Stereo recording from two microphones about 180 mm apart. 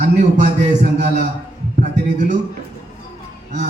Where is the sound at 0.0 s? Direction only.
40° right (ahead or behind).